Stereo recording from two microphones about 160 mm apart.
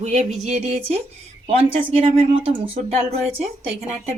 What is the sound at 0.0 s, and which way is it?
A woman's voice, 45° right (ahead or behind).